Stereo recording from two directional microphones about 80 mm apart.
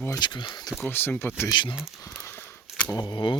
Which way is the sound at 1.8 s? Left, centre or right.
Left.